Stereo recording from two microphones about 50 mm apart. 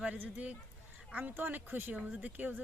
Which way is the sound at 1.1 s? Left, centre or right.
Right.